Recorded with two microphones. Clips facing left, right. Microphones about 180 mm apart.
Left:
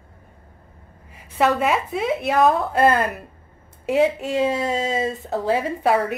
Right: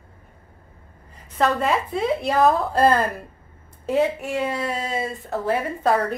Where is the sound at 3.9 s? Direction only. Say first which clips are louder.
Left 2 dB; 15° left (ahead or behind).